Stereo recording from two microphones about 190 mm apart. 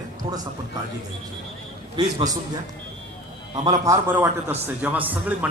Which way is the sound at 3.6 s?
20° right (ahead or behind).